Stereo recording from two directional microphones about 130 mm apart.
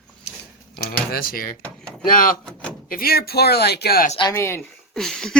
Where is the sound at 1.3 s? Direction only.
90° left.